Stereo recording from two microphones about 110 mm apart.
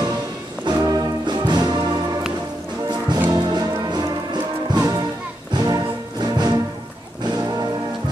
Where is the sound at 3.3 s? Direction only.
40° right (ahead or behind).